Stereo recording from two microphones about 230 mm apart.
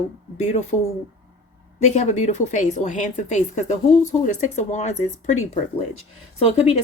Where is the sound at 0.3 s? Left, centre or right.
Left.